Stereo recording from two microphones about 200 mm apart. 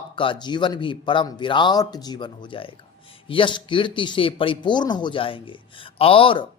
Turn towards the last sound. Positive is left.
turn(degrees=25)  # may be behind; listen again after turning